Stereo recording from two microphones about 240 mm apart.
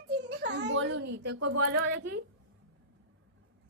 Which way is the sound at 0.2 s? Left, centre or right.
Right.